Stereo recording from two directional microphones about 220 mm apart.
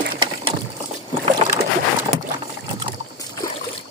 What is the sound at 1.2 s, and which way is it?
Boat, 20° right (ahead or behind).